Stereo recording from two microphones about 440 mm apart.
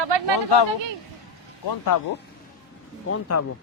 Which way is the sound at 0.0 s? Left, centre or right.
Right.